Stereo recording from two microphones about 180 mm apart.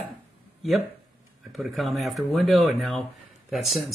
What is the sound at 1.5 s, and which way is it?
Speech, centre (ahead or behind).